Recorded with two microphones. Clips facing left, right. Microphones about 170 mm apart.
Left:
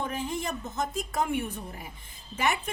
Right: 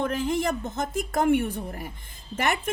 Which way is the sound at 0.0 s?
85° right.